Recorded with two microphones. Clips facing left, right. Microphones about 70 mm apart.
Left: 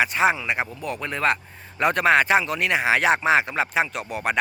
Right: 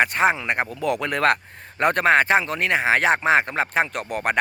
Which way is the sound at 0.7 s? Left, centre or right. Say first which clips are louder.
Right 6 dB; right.